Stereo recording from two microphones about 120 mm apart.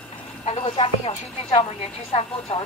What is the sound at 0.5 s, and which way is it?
A woman's voice, 60° left (ahead or behind).